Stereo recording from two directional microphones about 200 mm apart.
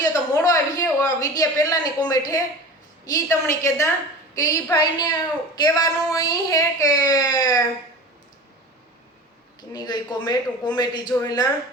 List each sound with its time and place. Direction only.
0.0 s a sound: 15° left (ahead or behind)
3.1 s a woman's voice: 15° left (ahead or behind)
9.6 s a man's voice: 20° left (ahead or behind)